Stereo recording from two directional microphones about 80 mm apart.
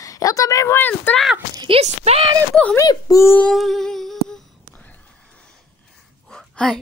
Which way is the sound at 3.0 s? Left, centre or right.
Left.